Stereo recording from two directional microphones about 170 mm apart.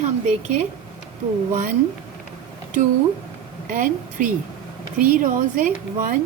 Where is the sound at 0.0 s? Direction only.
45° right (ahead or behind).